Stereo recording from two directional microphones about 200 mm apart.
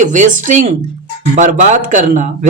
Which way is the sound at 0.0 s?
40° right (ahead or behind).